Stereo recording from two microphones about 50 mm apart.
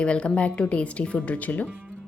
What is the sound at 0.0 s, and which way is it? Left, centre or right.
A woman's voice, left.